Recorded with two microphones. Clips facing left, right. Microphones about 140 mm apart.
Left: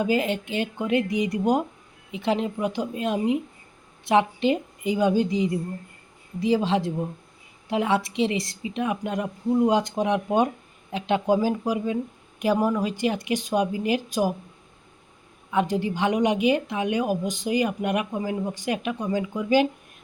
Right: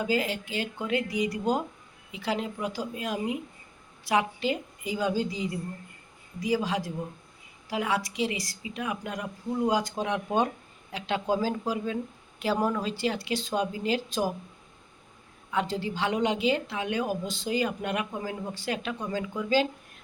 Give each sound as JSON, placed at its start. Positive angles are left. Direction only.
{"t": 0.0, "sound": "a woman's voice", "side_deg": 20}
{"t": 15.5, "sound": "a woman's voice", "side_deg": 15}